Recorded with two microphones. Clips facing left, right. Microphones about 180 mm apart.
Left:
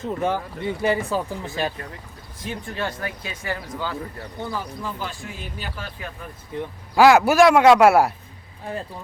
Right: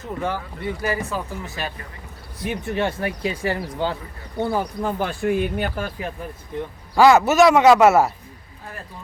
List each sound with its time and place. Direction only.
0.0 s speech: 20° left (ahead or behind)
2.5 s speech: 25° right (ahead or behind)
4.4 s speech: 60° right (ahead or behind)
6.9 s speech: centre (ahead or behind)